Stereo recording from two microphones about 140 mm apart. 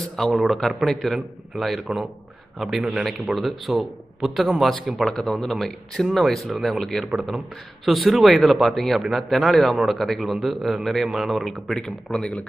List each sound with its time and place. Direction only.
0.1 s a man's voice: centre (ahead or behind)